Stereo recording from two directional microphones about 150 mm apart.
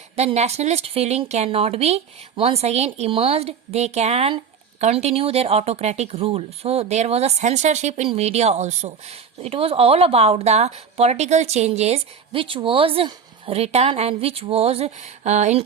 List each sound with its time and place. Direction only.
0.2 s speech: 45° right (ahead or behind)